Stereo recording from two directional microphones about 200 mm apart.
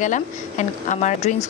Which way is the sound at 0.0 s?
40° left (ahead or behind).